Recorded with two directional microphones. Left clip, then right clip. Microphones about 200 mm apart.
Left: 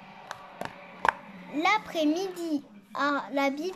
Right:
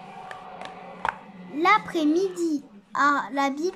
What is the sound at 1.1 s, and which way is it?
A child's voice, 15° left (ahead or behind).